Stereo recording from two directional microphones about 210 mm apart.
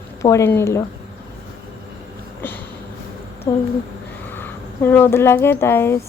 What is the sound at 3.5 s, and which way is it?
Speech, 15° left (ahead or behind).